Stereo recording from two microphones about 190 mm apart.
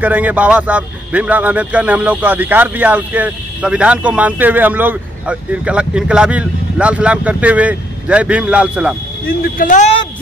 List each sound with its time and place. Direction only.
0.0 s a man's voice: 10° right (ahead or behind)
9.4 s speech: 45° left (ahead or behind)